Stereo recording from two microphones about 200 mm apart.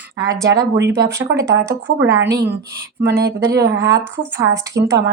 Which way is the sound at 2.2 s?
60° right (ahead or behind).